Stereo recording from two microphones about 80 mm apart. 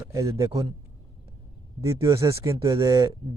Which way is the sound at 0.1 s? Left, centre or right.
Right.